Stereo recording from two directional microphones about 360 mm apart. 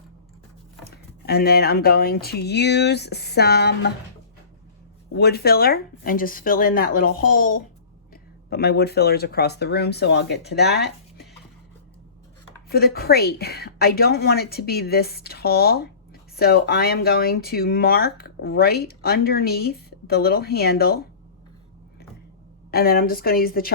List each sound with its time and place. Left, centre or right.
0.9 s speech: left
5.1 s speech: left
12.6 s speech: left
22.7 s speech: left